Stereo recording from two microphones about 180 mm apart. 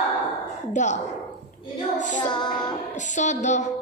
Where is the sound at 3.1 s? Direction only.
40° left (ahead or behind).